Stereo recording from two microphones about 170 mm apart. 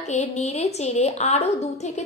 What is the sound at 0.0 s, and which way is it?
A woman's voice, 40° left (ahead or behind).